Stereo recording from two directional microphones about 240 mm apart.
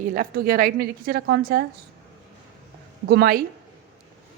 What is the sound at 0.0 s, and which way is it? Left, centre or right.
A woman's voice, right.